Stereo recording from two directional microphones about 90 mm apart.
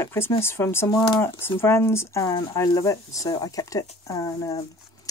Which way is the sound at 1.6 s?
25° left (ahead or behind).